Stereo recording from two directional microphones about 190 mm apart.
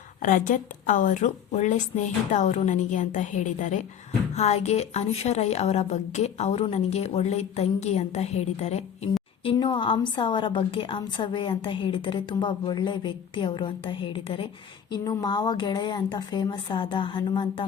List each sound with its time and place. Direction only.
0.2 s a woman's voice: 45° left (ahead or behind); by 17.7 s 25° left (ahead or behind)